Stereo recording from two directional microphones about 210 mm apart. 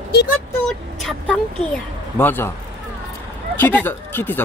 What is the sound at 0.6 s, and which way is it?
Speech, 5° left (ahead or behind).